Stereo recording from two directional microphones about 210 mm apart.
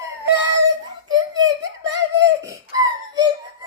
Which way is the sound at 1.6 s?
55° right (ahead or behind).